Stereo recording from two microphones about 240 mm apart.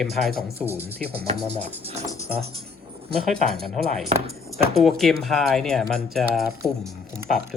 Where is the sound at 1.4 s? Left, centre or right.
Right.